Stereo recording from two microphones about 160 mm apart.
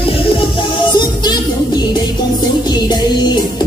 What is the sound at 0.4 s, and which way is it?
Music, 30° left (ahead or behind).